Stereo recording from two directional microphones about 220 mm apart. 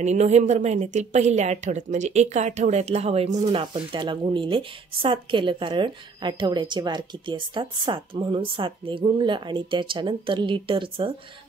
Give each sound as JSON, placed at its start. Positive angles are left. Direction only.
{"t": 0.0, "sound": "a woman's voice", "side_deg": -30}